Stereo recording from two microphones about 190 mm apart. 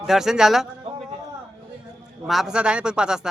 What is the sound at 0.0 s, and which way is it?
Speech, centre (ahead or behind).